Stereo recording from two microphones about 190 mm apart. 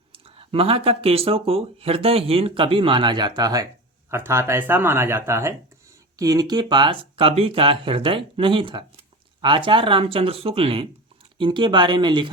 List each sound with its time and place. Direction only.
0.1 s speech: 30° right (ahead or behind)